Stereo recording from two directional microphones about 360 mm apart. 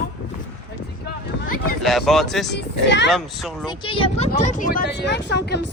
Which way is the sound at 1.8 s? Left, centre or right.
Centre.